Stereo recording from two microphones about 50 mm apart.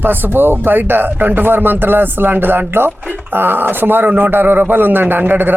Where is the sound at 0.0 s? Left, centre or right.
Right.